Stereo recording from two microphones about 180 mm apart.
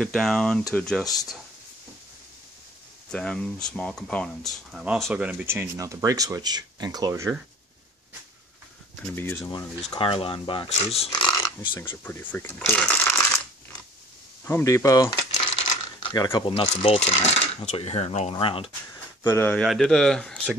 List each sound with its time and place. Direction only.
0.0 s speech: centre (ahead or behind)
3.1 s speech: 5° left (ahead or behind); by 7.3 s 15° right (ahead or behind)
9.0 s speech: 10° left (ahead or behind)
9.8 s speech: 30° left (ahead or behind)
11.1 s dog: 25° left (ahead or behind)
12.0 s speech: 10° left (ahead or behind)
14.4 s speech: 15° left (ahead or behind)
15.3 s speech: 30° left (ahead or behind)
19.2 s speech: 15° left (ahead or behind)
19.6 s speech: centre (ahead or behind)